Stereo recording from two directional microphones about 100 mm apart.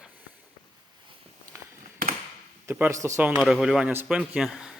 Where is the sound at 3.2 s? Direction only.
15° right (ahead or behind).